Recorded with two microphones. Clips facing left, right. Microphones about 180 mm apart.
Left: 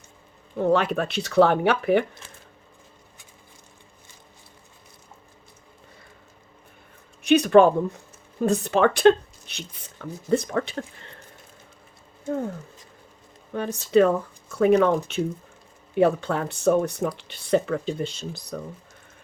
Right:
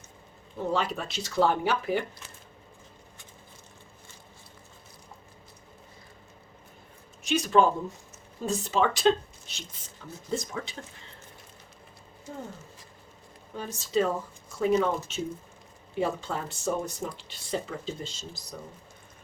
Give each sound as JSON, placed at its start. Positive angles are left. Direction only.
{"t": 0.6, "sound": "speech", "side_deg": 60}
{"t": 7.2, "sound": "speech", "side_deg": 60}
{"t": 13.5, "sound": "speech", "side_deg": 60}